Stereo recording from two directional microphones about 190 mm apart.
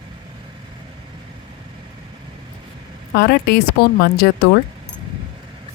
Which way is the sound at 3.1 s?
55° left (ahead or behind).